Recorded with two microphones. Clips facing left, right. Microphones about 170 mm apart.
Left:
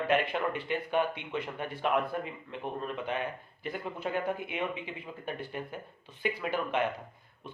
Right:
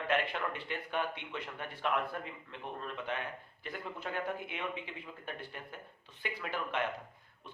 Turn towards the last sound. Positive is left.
turn(degrees=15)  # may be behind; listen again after turning